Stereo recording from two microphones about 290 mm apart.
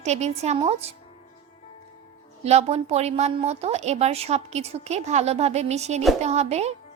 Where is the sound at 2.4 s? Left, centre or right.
Right.